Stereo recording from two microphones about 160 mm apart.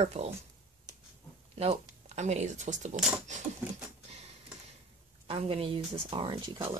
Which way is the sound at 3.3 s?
50° right (ahead or behind).